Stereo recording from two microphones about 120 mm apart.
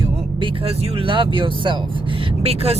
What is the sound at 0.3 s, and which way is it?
Speech, 50° right (ahead or behind).